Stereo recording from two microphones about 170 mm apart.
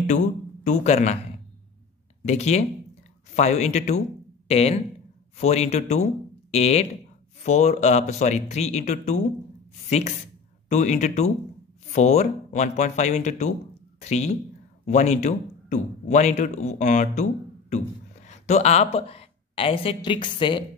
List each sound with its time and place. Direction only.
0.7 s speech: 45° left (ahead or behind)
2.2 s a man's voice: 40° left (ahead or behind)